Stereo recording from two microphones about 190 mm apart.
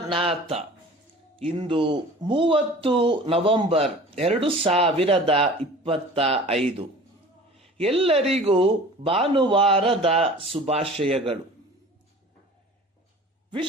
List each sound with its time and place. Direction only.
0.0 s speech: 25° right (ahead or behind)
7.8 s speech: 30° right (ahead or behind)